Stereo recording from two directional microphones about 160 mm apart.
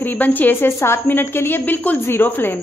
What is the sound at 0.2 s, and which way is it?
A woman's voice, 10° left (ahead or behind).